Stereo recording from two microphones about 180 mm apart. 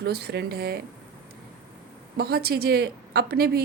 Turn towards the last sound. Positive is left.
turn(degrees=-60)  # may be behind; listen again after turning